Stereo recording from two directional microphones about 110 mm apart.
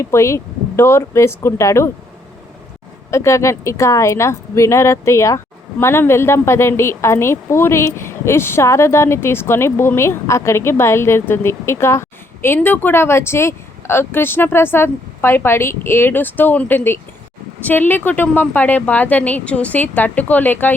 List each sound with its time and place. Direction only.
0.0 s a woman's voice: 25° left (ahead or behind)
3.1 s a woman's voice: 25° left (ahead or behind)